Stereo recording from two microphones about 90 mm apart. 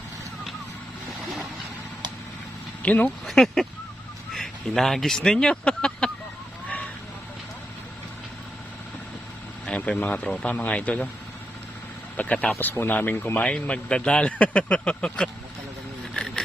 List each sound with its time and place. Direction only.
2.8 s a man's voice: 20° left (ahead or behind)
3.2 s speech: 5° left (ahead or behind)
9.6 s a man's voice: 15° left (ahead or behind)
12.1 s a man's voice: 15° left (ahead or behind)
16.1 s a sound: 10° left (ahead or behind)